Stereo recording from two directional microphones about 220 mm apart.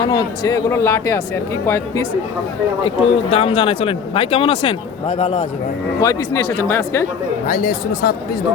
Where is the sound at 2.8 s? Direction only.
25° left (ahead or behind).